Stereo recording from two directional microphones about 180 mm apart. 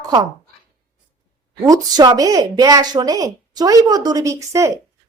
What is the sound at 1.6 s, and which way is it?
A woman's voice, 20° right (ahead or behind).